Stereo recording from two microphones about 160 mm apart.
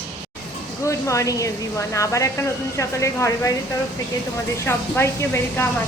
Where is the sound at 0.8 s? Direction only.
20° left (ahead or behind).